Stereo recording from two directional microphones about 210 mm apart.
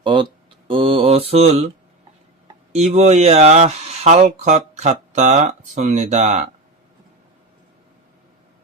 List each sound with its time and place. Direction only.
0.0 s a sound: 20° right (ahead or behind)
0.7 s mantra: 25° right (ahead or behind)
2.7 s speech: 30° right (ahead or behind)